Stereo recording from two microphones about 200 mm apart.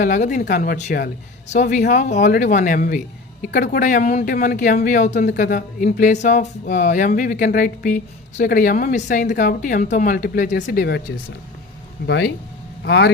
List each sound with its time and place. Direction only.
0.0 s speech: 40° left (ahead or behind); by 13.1 s 55° left (ahead or behind)